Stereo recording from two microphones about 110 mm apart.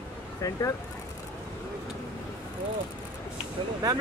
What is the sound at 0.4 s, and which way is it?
Speech, 30° left (ahead or behind).